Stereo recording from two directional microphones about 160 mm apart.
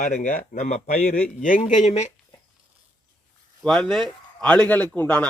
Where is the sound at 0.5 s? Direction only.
45° left (ahead or behind).